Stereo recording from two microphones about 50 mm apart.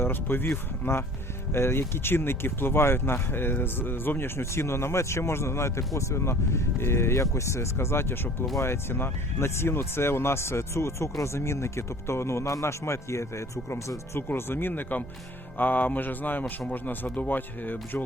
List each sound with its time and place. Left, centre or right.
0.0 s speech: left
8.5 s speech: left
14.2 s speech: left